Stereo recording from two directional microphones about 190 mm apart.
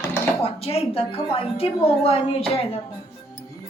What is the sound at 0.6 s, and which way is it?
A woman's voice, 30° left (ahead or behind).